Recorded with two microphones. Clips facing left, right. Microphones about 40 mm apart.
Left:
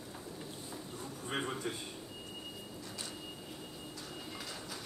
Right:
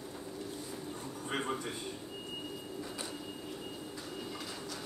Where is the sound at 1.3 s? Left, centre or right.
Centre.